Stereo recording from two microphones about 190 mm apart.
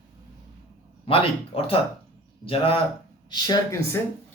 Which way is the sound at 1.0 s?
30° left (ahead or behind).